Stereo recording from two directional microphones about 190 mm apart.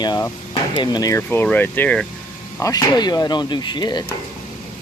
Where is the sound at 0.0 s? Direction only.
20° left (ahead or behind).